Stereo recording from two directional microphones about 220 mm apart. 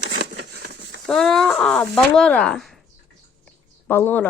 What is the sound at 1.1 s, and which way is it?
Speech, centre (ahead or behind).